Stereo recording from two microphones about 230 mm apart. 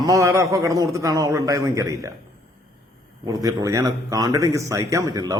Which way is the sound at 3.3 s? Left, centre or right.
Centre.